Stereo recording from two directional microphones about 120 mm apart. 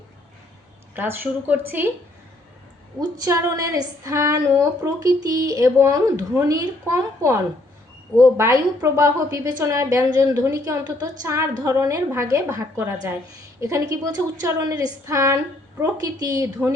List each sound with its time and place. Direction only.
0.9 s speech: 15° right (ahead or behind)
3.0 s a woman's voice: 30° right (ahead or behind)